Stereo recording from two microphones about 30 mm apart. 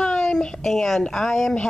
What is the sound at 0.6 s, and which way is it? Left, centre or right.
Speech, centre.